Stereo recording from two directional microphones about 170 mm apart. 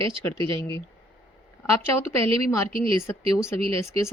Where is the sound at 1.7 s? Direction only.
15° left (ahead or behind).